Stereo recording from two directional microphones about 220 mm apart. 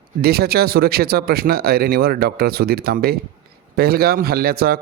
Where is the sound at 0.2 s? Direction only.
45° right (ahead or behind).